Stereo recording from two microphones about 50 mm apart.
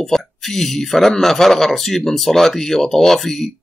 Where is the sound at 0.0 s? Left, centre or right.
Centre.